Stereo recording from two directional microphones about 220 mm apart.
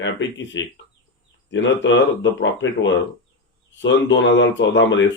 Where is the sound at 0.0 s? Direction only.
55° left (ahead or behind).